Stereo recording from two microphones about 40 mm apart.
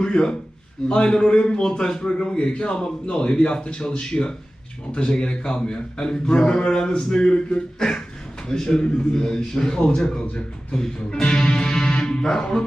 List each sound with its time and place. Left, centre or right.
0.0 s a man's voice: centre